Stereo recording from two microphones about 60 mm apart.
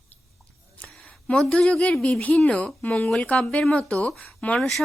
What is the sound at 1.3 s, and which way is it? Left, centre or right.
A woman's voice, centre.